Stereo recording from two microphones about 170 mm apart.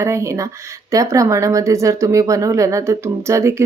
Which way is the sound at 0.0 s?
15° right (ahead or behind).